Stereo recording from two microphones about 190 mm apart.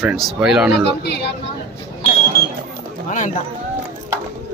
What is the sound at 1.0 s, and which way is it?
Speech, 60° left (ahead or behind).